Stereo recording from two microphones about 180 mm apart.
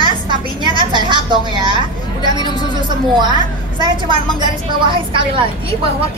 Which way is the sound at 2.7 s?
25° right (ahead or behind).